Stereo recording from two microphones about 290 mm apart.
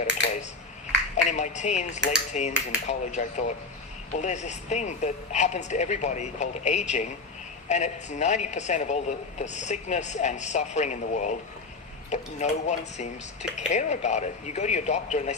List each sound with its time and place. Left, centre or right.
1.1 s speech: left